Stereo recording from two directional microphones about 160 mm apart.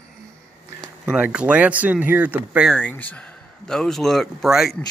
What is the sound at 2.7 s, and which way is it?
Speech, 10° left (ahead or behind).